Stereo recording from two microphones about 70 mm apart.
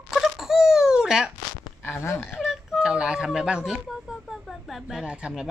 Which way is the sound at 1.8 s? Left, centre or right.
Left.